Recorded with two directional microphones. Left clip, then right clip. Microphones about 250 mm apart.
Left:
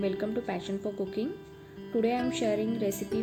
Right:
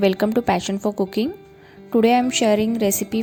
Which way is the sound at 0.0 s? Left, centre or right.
Right.